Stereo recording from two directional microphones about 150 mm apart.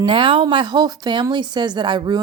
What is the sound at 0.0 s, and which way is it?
A woman's voice, 35° right (ahead or behind).